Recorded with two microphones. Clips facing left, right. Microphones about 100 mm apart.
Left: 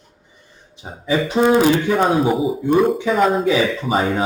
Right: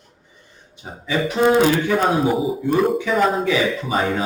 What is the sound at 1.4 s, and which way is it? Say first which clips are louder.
A man's voice: left 1 dB; centre (ahead or behind).